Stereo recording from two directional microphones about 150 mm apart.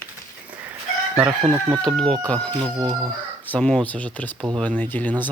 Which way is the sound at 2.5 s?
30° right (ahead or behind).